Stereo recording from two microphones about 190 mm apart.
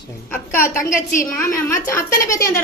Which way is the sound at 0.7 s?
45° left (ahead or behind).